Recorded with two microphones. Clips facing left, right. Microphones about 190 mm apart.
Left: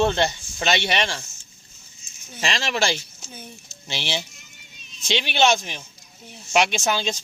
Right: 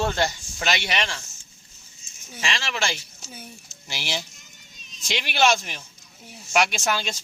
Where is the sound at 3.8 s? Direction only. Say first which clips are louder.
Left 3 dB; 25° left (ahead or behind).